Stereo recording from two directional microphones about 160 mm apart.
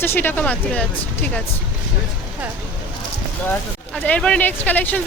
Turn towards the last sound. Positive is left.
turn(degrees=10)  # may be behind; listen again after turning